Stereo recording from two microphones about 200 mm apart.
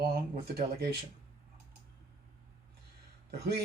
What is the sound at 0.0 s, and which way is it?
Speech, 50° right (ahead or behind).